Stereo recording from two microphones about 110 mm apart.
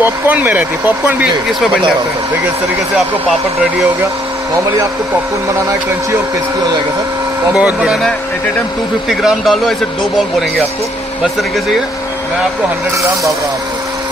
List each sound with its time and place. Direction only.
0.0 s speech: 15° right (ahead or behind)
7.5 s speech: 10° right (ahead or behind)
9.1 s speech: 5° right (ahead or behind)